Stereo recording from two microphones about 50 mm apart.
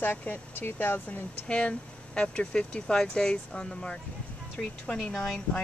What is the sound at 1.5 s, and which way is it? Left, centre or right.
A woman's voice, left.